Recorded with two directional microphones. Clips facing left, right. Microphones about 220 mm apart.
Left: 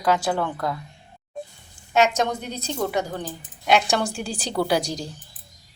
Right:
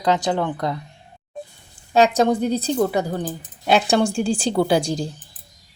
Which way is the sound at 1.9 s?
35° right (ahead or behind).